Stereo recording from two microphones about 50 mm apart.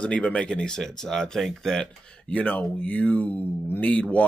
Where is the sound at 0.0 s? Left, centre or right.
Left; by 1.8 s centre.